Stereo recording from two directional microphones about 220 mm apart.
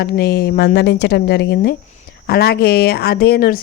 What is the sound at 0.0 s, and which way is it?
Speech, 45° left (ahead or behind).